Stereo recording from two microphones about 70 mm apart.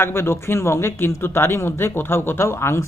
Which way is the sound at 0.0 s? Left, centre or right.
Left.